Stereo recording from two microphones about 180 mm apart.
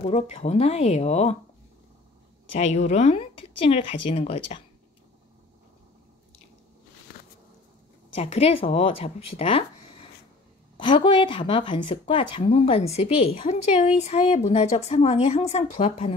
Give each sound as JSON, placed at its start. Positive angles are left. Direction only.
{"t": 0.0, "sound": "speech", "side_deg": 35}
{"t": 2.6, "sound": "speech", "side_deg": 40}
{"t": 8.2, "sound": "speech", "side_deg": 35}
{"t": 10.8, "sound": "speech", "side_deg": 25}